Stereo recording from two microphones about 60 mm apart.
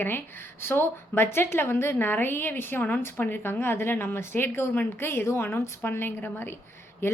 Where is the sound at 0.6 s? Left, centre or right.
Left.